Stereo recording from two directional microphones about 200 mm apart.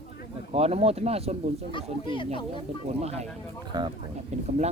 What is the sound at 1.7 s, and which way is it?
Speech, 25° left (ahead or behind).